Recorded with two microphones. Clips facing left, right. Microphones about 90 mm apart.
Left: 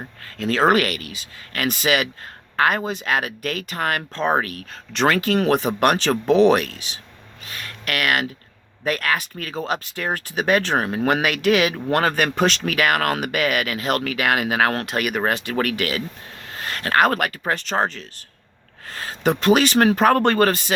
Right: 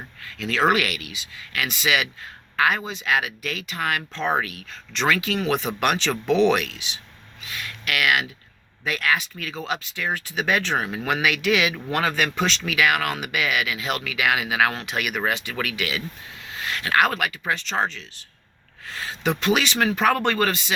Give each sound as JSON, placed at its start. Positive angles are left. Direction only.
{"t": 0.3, "sound": "speech", "side_deg": 40}